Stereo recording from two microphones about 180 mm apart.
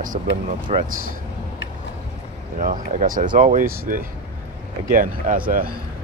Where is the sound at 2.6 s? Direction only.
50° right (ahead or behind).